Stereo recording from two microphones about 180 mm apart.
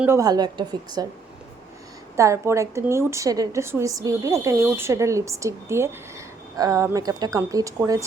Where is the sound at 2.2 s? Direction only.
15° right (ahead or behind).